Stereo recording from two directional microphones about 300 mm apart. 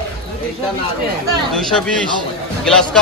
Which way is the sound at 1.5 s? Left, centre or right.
Centre.